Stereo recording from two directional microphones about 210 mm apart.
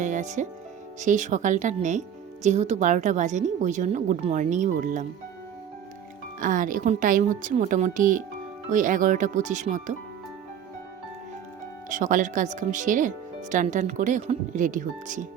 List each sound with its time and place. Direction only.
0.0 s music: 35° right (ahead or behind)
0.9 s speech: 35° right (ahead or behind)
6.4 s speech: 40° right (ahead or behind)
11.9 s speech: 35° right (ahead or behind)